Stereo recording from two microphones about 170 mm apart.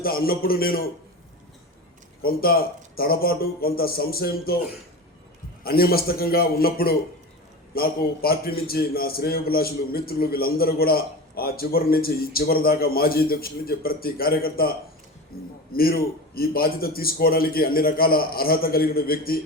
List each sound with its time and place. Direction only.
0.0 s a man's voice: 60° left (ahead or behind)
2.2 s a man's voice: 60° left (ahead or behind)
5.6 s a man's voice: 60° left (ahead or behind)